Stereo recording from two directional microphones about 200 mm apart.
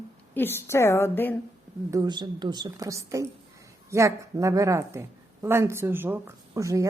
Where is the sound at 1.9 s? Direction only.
20° right (ahead or behind).